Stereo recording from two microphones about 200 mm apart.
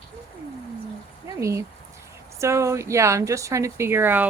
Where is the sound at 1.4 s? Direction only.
15° right (ahead or behind).